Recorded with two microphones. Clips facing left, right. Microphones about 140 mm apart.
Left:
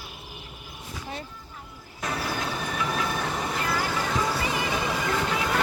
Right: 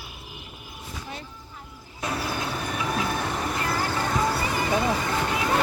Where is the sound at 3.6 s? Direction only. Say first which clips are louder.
Right 1 dB; 30° right (ahead or behind).